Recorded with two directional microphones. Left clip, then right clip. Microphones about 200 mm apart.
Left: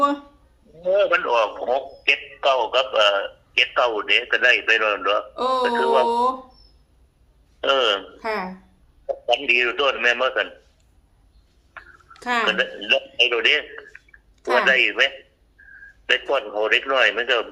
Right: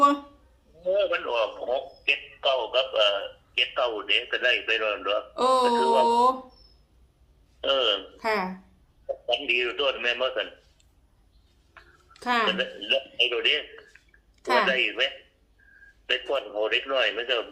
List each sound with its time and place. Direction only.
0.8 s a man's voice: 55° left (ahead or behind)
5.4 s speech: 15° right (ahead or behind)
7.6 s a man's voice: 55° left (ahead or behind)
8.2 s speech: 10° right (ahead or behind)
9.0 s a man's voice: 55° left (ahead or behind)
11.8 s a sound: 55° left (ahead or behind)
12.1 s speech: centre (ahead or behind)
12.5 s speech: 55° left (ahead or behind)
13.1 s a sound: 55° left (ahead or behind)
14.6 s a man's voice: 55° left (ahead or behind)